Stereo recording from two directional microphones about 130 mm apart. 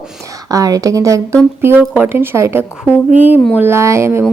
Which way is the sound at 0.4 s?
25° right (ahead or behind).